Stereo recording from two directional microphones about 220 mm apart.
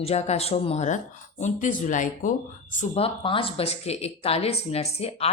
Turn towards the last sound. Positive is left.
turn(degrees=25)  # may be behind; listen again after turning